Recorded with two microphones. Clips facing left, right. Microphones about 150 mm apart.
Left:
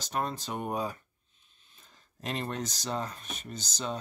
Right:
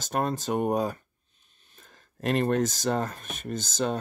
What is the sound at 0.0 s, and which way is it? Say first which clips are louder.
Speech: right 5 dB; 50° right (ahead or behind).